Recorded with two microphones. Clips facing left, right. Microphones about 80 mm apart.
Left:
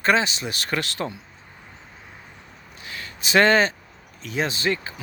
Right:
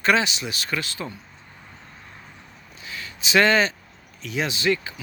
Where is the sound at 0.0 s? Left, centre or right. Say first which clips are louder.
Even; left.